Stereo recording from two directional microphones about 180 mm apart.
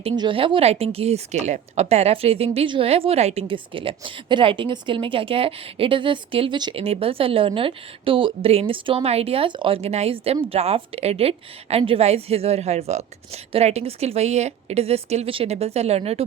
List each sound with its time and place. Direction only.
0.0 s a woman's voice: 30° right (ahead or behind)